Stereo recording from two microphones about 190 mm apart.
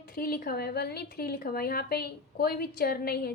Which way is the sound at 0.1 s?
50° left (ahead or behind).